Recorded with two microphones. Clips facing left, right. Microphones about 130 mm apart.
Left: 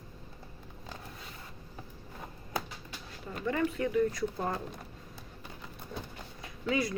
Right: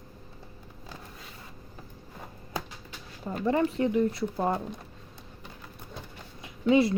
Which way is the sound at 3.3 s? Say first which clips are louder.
Right 5 dB; 30° right (ahead or behind).